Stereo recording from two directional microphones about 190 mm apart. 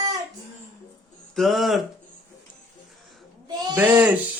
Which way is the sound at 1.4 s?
Centre (ahead or behind).